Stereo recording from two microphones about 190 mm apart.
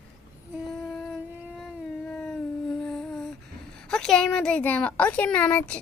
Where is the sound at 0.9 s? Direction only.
Centre (ahead or behind).